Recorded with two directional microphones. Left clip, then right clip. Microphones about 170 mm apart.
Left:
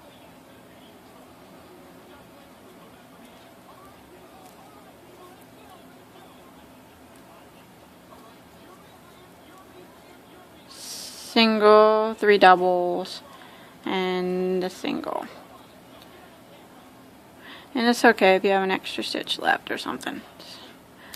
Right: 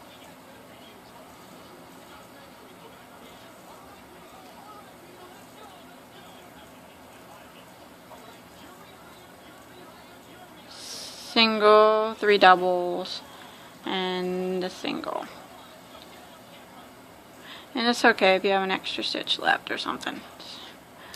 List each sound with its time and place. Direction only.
10.8 s speech: 35° left (ahead or behind)
17.5 s speech: 30° left (ahead or behind)